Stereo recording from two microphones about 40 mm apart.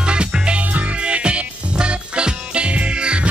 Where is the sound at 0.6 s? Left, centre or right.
Right.